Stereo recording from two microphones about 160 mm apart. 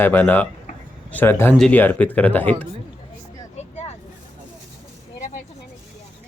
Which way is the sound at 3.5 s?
45° left (ahead or behind).